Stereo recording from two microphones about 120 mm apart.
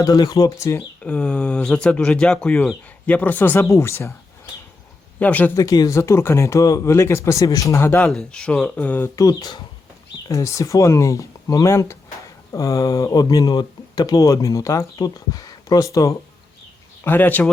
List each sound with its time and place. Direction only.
0.0 s speech: 30° left (ahead or behind)
1.0 s speech: 10° left (ahead or behind)
5.2 s speech: 15° left (ahead or behind)
5.5 s speech: 30° left (ahead or behind)
8.1 s speech: 5° left (ahead or behind)
9.1 s speech: 30° left (ahead or behind)
17.0 s speech: 15° left (ahead or behind)